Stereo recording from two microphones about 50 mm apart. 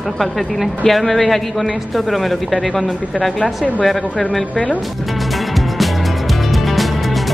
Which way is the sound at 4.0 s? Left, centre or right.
Left.